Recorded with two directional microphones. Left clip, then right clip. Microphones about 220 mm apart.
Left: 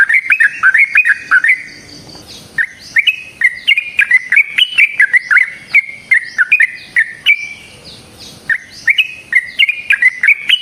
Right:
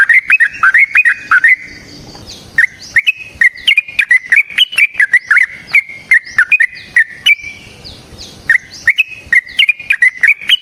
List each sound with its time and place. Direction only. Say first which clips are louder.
0.1 s bird: right 2 dB; 15° right (ahead or behind)
2.6 s bird: right 3 dB; 20° right (ahead or behind)
8.4 s bird: right 3 dB; 20° right (ahead or behind)